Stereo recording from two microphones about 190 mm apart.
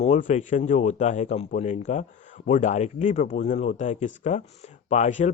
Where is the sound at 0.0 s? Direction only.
40° left (ahead or behind).